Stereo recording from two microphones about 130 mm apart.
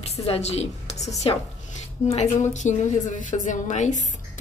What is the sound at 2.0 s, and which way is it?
A woman's voice, 60° left (ahead or behind).